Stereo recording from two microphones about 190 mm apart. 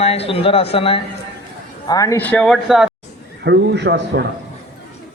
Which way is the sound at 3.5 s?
65° right (ahead or behind).